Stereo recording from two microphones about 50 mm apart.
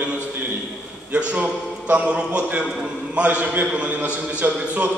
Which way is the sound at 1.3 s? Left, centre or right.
Right.